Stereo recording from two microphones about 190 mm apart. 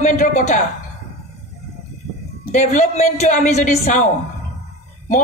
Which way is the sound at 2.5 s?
40° left (ahead or behind).